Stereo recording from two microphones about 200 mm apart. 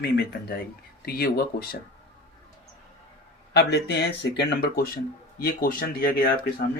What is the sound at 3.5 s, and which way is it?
Speech, 55° left (ahead or behind).